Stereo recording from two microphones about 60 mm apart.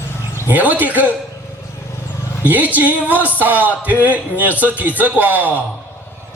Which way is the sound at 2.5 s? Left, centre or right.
Right.